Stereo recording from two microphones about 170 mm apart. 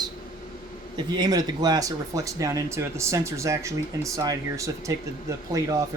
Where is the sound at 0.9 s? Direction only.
25° right (ahead or behind).